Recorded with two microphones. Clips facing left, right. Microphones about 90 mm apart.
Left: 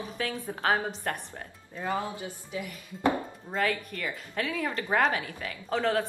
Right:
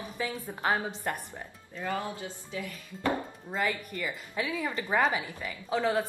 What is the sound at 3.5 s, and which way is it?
A woman's voice, 10° right (ahead or behind).